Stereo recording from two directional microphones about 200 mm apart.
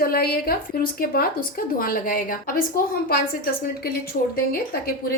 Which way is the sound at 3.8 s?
50° left (ahead or behind).